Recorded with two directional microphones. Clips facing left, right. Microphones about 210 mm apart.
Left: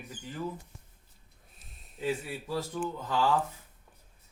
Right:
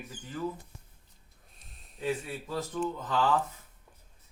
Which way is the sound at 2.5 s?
10° left (ahead or behind).